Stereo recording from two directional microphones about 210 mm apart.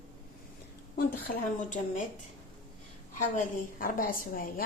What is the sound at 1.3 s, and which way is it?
Speech, 40° left (ahead or behind).